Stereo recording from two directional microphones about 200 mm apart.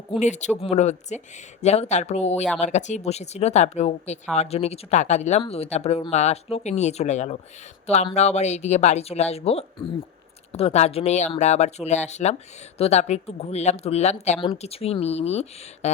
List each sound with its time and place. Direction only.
0.2 s speech: 35° left (ahead or behind)